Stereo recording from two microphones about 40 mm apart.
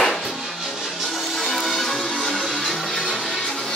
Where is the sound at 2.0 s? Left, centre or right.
Centre.